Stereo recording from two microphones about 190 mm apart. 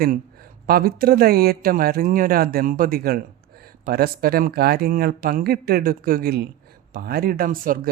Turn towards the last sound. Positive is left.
turn(degrees=-45)  # may be behind; listen again after turning